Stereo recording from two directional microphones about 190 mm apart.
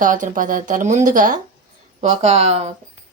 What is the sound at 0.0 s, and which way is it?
Speech, 45° right (ahead or behind).